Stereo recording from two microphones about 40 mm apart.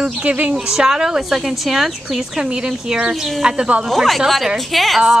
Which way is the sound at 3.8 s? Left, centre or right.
Centre.